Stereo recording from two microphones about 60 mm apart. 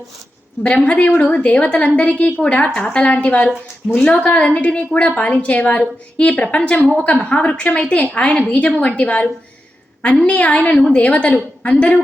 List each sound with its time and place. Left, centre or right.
0.6 s a woman's voice: centre
10.2 s a woman's voice: left